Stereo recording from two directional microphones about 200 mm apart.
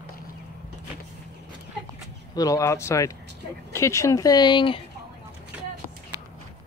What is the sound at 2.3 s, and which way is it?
Speech, 15° left (ahead or behind).